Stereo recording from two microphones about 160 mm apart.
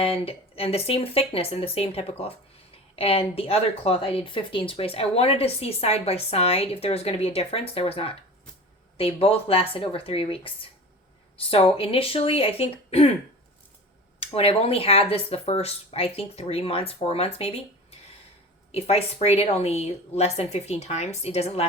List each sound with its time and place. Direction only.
0.0 s speech: 35° left (ahead or behind)
14.2 s speech: 35° left (ahead or behind)
18.7 s speech: 40° left (ahead or behind)